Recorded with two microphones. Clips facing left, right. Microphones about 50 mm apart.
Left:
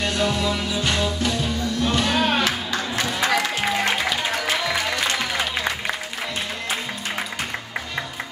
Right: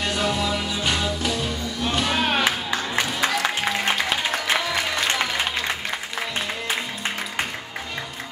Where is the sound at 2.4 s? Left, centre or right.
Centre.